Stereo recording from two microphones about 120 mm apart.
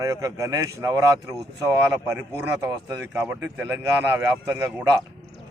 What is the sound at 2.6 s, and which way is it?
A man's voice, 25° right (ahead or behind).